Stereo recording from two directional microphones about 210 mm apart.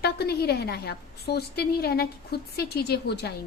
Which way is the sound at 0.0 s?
50° left (ahead or behind).